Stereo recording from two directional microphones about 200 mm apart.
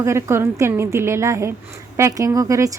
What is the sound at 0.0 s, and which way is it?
Speech, 15° right (ahead or behind).